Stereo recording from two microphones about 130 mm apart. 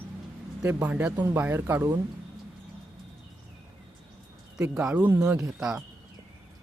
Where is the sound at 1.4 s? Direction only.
15° right (ahead or behind).